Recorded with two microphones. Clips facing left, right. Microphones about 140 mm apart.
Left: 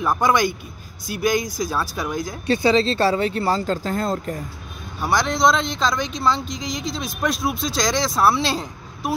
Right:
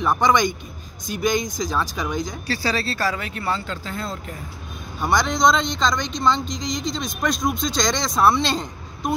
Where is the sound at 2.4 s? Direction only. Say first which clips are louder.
Left 12 dB; 20° left (ahead or behind); by 4.4 s 45° left (ahead or behind).